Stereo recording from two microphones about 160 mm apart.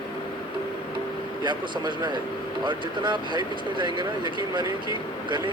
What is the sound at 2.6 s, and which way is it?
Speech, 30° right (ahead or behind).